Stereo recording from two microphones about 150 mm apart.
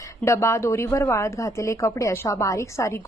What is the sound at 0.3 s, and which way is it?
A woman's voice, 20° left (ahead or behind).